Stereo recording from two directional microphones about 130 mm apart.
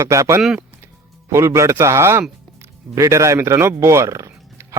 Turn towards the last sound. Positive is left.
turn(degrees=-25)  # may be behind; listen again after turning